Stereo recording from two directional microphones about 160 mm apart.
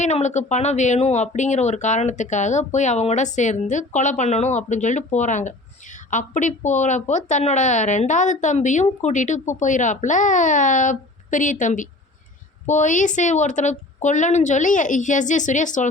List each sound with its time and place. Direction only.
0.0 s a woman's voice: 45° left (ahead or behind)